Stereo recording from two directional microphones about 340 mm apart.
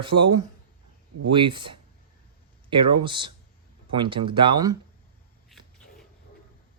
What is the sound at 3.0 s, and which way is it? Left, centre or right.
Speech, centre.